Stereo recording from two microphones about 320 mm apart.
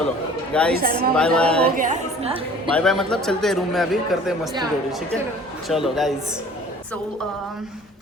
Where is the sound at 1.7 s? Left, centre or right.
Right.